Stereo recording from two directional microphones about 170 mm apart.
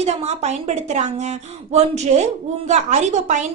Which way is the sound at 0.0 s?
40° right (ahead or behind).